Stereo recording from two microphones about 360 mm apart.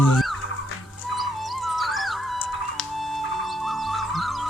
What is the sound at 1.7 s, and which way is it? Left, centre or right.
Music, centre.